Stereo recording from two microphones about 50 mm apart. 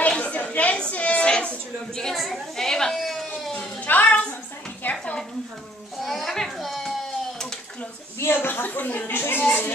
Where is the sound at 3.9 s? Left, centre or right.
Left.